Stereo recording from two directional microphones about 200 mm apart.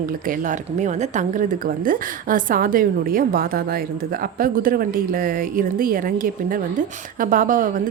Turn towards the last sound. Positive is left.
turn(degrees=-40)  # may be behind; listen again after turning